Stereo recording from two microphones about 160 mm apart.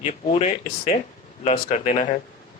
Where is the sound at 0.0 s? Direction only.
40° left (ahead or behind).